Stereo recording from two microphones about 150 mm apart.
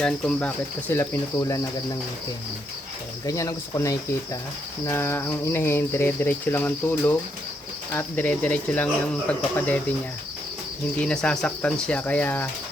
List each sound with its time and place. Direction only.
0.0 s cricket: 10° left (ahead or behind)
3.2 s speech: 20° left (ahead or behind)
4.9 s cricket: 15° left (ahead or behind)
11.0 s cricket: 5° left (ahead or behind)